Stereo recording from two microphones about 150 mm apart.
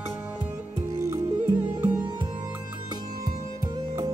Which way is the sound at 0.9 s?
20° right (ahead or behind).